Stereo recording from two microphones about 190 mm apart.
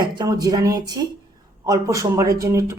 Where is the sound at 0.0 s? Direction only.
20° right (ahead or behind).